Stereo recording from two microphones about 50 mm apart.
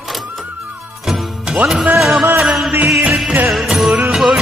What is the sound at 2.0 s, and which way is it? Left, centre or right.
Speech, centre.